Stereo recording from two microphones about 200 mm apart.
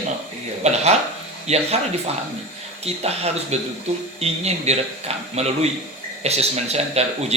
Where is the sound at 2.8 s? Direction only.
30° right (ahead or behind).